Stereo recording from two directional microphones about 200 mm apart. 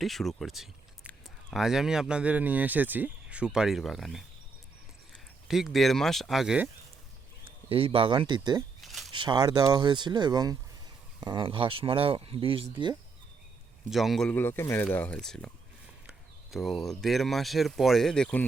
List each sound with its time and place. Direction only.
0.0 s speech: centre (ahead or behind)
5.5 s speech: centre (ahead or behind)
7.4 s speech: 25° right (ahead or behind)
8.8 s a sound: centre (ahead or behind)
9.1 s speech: 20° right (ahead or behind)
13.9 s speech: centre (ahead or behind)